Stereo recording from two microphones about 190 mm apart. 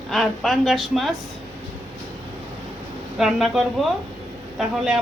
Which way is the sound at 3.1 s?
Centre (ahead or behind).